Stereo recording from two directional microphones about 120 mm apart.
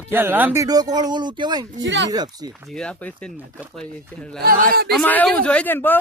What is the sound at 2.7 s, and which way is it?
Speech, 5° left (ahead or behind).